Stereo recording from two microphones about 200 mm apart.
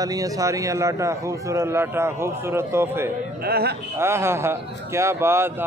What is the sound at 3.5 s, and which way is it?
Speech, 50° right (ahead or behind).